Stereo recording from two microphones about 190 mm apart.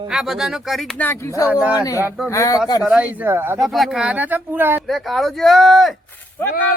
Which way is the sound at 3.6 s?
Centre (ahead or behind).